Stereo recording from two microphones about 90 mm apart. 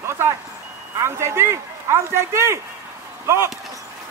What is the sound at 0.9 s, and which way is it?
Speech, 30° right (ahead or behind).